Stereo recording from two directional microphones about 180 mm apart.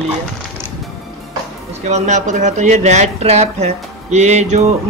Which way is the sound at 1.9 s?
40° right (ahead or behind).